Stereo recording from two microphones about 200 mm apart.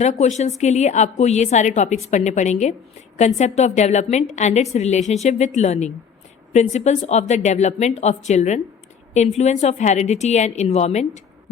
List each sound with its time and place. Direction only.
0.0 s a woman's voice: 35° left (ahead or behind)